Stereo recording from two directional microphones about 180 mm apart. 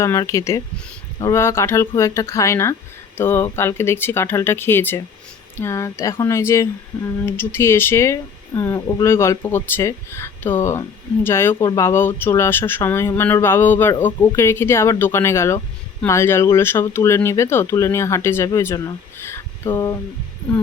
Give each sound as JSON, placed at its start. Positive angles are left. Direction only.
{"t": 0.0, "sound": "speech", "side_deg": 15}